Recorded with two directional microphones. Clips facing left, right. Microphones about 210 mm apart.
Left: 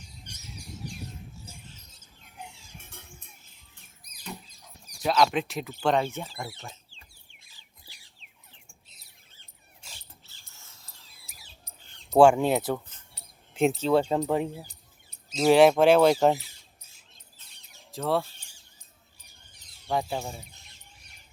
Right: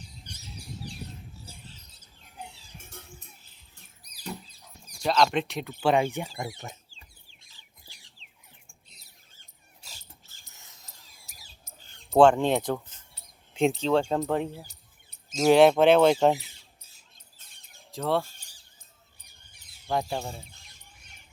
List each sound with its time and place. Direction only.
0.3 s bird: 35° right (ahead or behind)
1.5 s rodents: 35° right (ahead or behind)
4.0 s rodents: 35° right (ahead or behind)
5.0 s speech: 5° left (ahead or behind)
5.8 s speech: 10° right (ahead or behind)
9.3 s rodents: 40° right (ahead or behind)
10.4 s a sound: 20° right (ahead or behind)
11.2 s bird: 40° right (ahead or behind)
12.1 s speech: 10° left (ahead or behind)
17.3 s bird: 50° right (ahead or behind)
17.9 s speech: centre (ahead or behind)
19.9 s speech: centre (ahead or behind)